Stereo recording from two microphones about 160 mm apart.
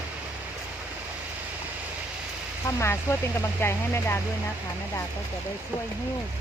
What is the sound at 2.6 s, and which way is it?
Speech, 15° left (ahead or behind).